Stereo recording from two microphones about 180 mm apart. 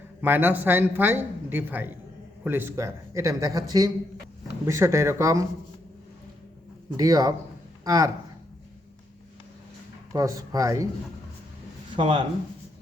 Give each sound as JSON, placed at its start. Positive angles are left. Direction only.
{"t": 0.2, "sound": "a woman's voice", "side_deg": -10}
{"t": 6.9, "sound": "speech", "side_deg": -20}
{"t": 10.1, "sound": "speech", "side_deg": -20}
{"t": 11.9, "sound": "speech", "side_deg": -30}